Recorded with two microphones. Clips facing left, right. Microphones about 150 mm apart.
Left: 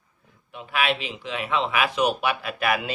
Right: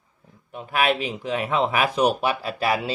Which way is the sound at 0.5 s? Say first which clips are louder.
Right 3 dB; 40° right (ahead or behind).